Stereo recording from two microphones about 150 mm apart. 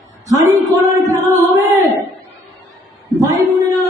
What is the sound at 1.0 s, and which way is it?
Music, 25° right (ahead or behind).